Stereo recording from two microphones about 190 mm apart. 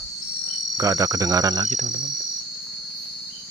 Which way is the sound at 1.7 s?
40° right (ahead or behind).